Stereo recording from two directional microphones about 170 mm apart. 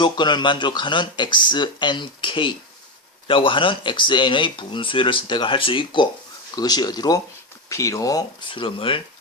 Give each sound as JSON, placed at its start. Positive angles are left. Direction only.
{"t": 0.0, "sound": "speech", "side_deg": 25}